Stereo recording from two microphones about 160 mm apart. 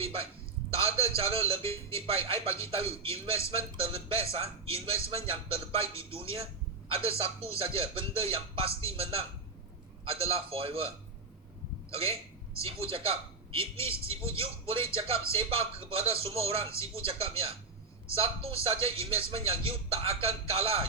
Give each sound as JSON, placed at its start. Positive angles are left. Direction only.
{"t": 0.0, "sound": "a man's voice", "side_deg": -35}
{"t": 13.7, "sound": "speech", "side_deg": 15}
{"t": 14.1, "sound": "a man's voice", "side_deg": -35}